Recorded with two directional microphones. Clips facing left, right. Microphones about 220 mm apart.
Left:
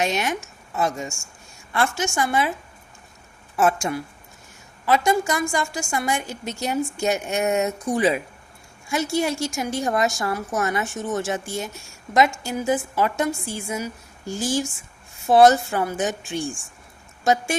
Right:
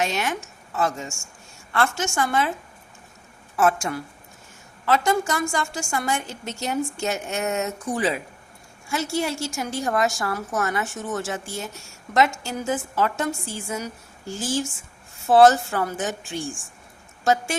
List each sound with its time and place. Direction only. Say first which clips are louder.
0.0 s a woman's voice: left 2 dB; 15° left (ahead or behind)
3.6 s a woman's voice: left 1 dB; 20° left (ahead or behind)